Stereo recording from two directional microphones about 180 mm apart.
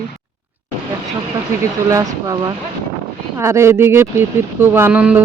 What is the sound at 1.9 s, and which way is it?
Speech, 20° right (ahead or behind).